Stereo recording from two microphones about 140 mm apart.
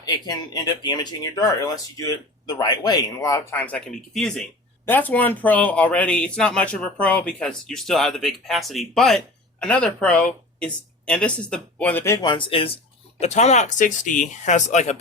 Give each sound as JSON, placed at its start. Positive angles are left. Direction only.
{"t": 0.0, "sound": "speech", "side_deg": 25}
{"t": 3.5, "sound": "speech", "side_deg": 10}
{"t": 12.2, "sound": "speech", "side_deg": 35}
{"t": 13.1, "sound": "speech", "side_deg": 55}